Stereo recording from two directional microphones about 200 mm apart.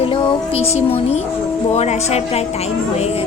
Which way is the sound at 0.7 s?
30° left (ahead or behind).